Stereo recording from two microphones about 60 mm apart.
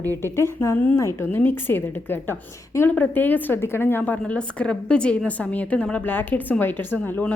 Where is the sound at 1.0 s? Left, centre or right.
Left.